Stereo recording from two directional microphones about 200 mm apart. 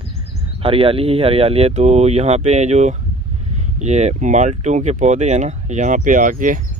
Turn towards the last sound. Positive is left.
turn(degrees=-40)  # may be behind; listen again after turning